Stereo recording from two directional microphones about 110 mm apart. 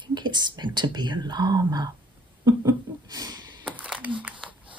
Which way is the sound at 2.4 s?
35° right (ahead or behind).